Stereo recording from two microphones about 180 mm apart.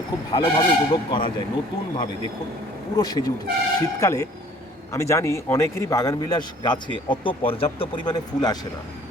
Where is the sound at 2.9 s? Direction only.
20° left (ahead or behind).